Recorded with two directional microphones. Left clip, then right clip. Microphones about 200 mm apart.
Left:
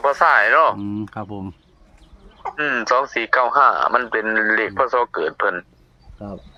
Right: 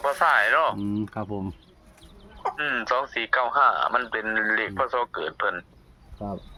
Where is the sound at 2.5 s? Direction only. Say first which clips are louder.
Left 8 dB; 40° left (ahead or behind).